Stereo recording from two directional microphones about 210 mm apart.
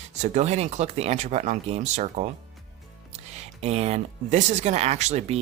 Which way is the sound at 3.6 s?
30° right (ahead or behind).